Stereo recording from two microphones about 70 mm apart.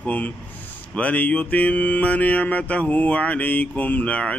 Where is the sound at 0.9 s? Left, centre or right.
Left.